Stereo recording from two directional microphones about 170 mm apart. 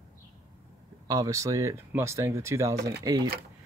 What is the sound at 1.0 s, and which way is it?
Speech, 20° right (ahead or behind).